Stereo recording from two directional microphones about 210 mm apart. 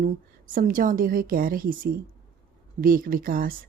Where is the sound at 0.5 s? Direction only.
40° right (ahead or behind).